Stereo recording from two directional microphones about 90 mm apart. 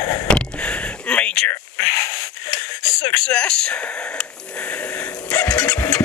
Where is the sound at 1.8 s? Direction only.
35° left (ahead or behind).